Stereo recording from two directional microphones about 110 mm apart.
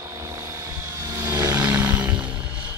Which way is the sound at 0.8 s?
30° right (ahead or behind).